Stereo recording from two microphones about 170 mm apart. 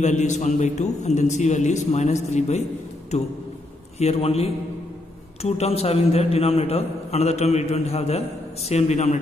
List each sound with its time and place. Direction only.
0.0 s a man's voice: 45° left (ahead or behind)
4.0 s a man's voice: 35° left (ahead or behind)